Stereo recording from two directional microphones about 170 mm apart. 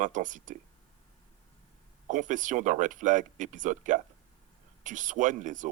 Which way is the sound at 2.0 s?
45° right (ahead or behind).